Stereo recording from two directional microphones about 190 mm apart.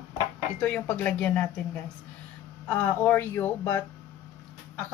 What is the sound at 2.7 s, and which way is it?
A woman's voice, 10° left (ahead or behind).